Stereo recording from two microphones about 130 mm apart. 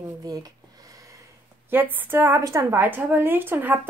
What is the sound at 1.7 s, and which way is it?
A woman's voice, 15° right (ahead or behind).